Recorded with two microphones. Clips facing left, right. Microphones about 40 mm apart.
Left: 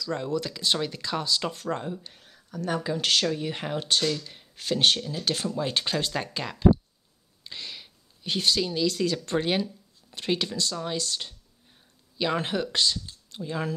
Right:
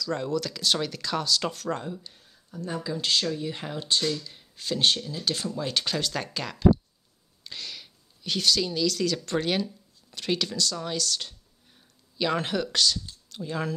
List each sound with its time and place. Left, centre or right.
0.1 s speech: centre
2.2 s a sound: left
2.8 s speech: left
3.3 s speech: left
5.6 s speech: left
7.4 s a sound: centre
8.7 s speech: left
12.7 s a sound: centre
13.4 s speech: centre